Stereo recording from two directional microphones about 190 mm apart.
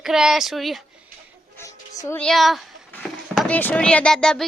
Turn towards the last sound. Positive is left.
turn(degrees=5)  # may be behind; listen again after turning